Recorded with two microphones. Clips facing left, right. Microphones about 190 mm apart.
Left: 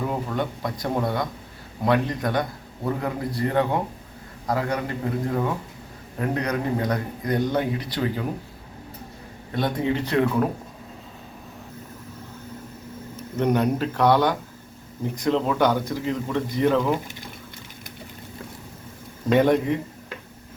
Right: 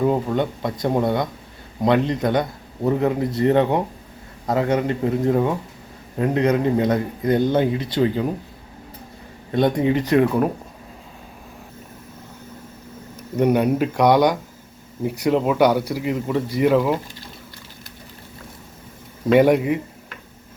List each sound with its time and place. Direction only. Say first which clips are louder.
0.1 s speech: right 6 dB; 25° right (ahead or behind)
9.6 s a man's voice: right 6 dB; 20° right (ahead or behind)
13.3 s a man's voice: right 4 dB; 10° right (ahead or behind)
19.3 s a man's voice: right 4 dB; 10° right (ahead or behind)